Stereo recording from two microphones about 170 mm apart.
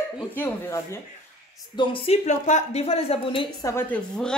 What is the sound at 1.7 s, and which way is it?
A woman's voice, 30° left (ahead or behind).